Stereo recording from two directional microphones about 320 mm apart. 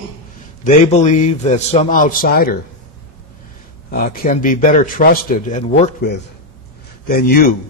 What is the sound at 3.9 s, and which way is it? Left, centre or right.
A man's voice, left.